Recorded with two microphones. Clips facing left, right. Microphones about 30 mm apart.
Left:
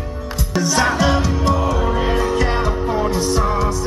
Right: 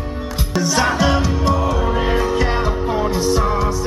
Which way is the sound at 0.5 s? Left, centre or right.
Centre.